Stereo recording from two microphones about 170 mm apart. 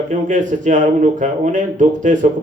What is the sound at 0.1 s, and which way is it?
A man's voice, 45° right (ahead or behind).